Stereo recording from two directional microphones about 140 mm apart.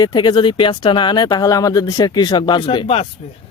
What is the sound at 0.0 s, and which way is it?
Speech, 30° left (ahead or behind).